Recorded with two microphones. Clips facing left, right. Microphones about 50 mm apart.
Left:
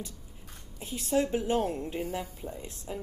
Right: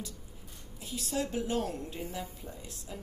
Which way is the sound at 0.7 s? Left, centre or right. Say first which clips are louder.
Left 6 dB; left.